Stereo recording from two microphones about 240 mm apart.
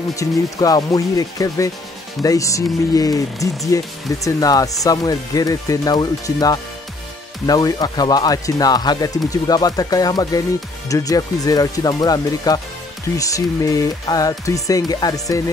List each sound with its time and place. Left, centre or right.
0.1 s speech: centre